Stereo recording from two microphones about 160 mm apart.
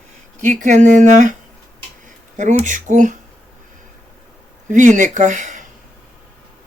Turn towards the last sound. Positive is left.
turn(degrees=-50)  # may be behind; listen again after turning